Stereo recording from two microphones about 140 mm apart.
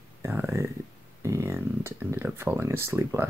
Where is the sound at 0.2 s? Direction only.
15° right (ahead or behind).